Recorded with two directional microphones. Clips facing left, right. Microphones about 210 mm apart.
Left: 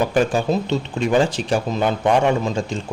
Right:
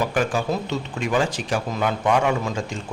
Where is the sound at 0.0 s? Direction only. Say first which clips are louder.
Left 4 dB; 25° left (ahead or behind).